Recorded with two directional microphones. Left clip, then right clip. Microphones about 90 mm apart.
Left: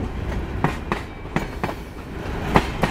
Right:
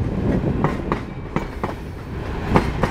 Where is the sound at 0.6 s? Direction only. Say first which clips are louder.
Right 2 dB; 30° left (ahead or behind).